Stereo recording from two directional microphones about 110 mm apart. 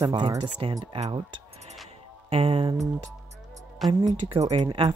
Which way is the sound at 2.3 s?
55° right (ahead or behind).